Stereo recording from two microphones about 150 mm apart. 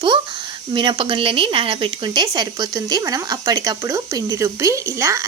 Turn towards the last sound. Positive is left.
turn(degrees=-20)  # may be behind; listen again after turning